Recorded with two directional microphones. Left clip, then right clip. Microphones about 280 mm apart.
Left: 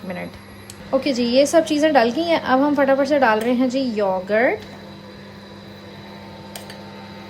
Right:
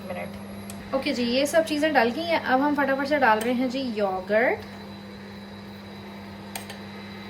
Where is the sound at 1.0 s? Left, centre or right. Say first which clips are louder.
Left 8 dB; left.